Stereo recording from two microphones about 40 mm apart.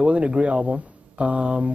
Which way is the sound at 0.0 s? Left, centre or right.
Right.